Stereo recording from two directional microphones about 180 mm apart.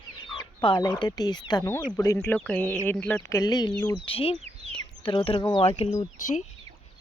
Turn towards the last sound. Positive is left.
turn(degrees=45)  # may be behind; listen again after turning